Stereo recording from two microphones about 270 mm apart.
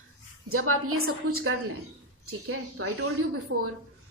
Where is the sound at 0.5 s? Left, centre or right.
Right.